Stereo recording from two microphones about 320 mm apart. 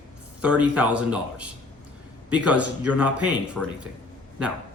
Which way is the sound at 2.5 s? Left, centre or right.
Centre.